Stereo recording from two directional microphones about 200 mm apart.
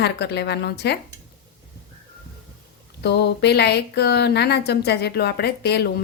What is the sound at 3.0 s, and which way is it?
Speech, 55° left (ahead or behind).